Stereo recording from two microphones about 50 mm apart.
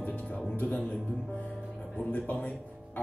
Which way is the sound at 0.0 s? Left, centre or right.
Left.